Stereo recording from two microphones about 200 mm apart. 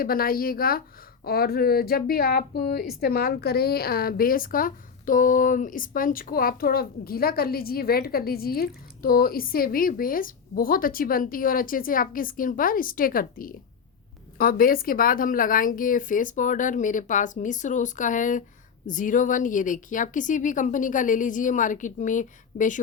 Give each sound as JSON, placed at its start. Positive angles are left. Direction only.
{"t": 0.0, "sound": "a woman's voice", "side_deg": 45}